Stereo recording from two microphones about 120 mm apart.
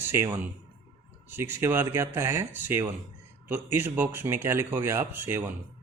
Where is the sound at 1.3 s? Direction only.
20° right (ahead or behind).